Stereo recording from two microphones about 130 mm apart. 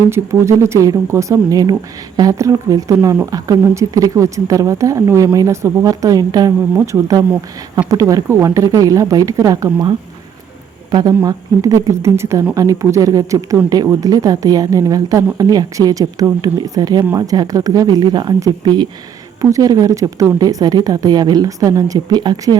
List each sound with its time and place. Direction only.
0.1 s speech: 20° right (ahead or behind)
11.2 s speech: 25° right (ahead or behind)